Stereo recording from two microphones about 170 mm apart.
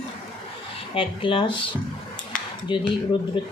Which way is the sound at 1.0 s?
30° left (ahead or behind).